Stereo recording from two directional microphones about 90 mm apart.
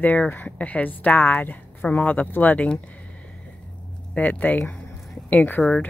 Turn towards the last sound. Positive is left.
turn(degrees=15)  # may be behind; listen again after turning